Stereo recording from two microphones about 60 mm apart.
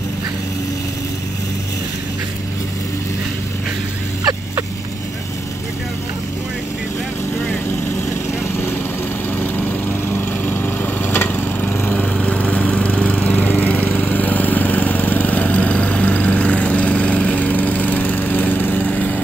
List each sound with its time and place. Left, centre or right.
9.4 s lawn mower: left
11.2 s lawn mower: centre